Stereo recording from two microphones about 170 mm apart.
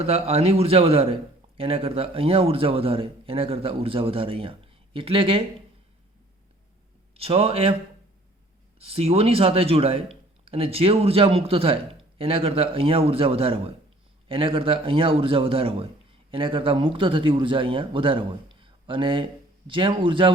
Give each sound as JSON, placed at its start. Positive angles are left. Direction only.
{"t": 0.0, "sound": "a man's voice", "side_deg": -35}
{"t": 7.1, "sound": "a man's voice", "side_deg": -35}
{"t": 8.8, "sound": "a man's voice", "side_deg": -35}